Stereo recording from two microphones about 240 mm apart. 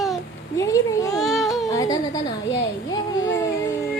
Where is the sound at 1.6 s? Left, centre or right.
Centre.